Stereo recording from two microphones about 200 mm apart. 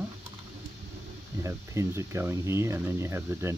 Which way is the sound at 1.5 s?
15° right (ahead or behind).